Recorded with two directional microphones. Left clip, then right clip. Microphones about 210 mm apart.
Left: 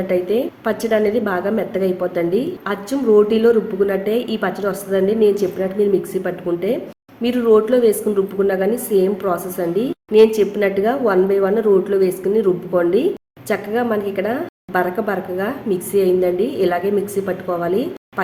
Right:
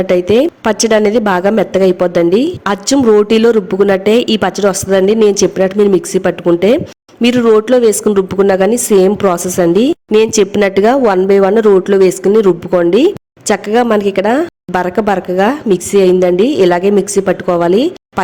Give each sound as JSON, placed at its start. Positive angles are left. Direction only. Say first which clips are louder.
{"t": 0.1, "sound": "a woman's voice", "louder": "right 8 dB", "side_deg": -45}